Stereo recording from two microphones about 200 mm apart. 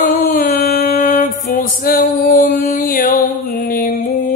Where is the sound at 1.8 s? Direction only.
45° left (ahead or behind).